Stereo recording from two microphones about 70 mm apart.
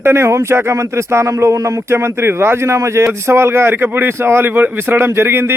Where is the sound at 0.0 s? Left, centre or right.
Right.